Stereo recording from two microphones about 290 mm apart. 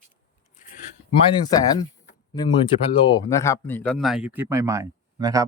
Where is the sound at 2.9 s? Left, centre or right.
Centre.